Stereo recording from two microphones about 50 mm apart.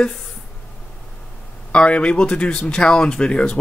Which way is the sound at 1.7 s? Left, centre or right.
Left.